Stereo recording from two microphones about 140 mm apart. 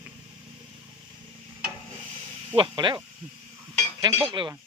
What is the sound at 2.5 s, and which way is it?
Speech, 35° right (ahead or behind).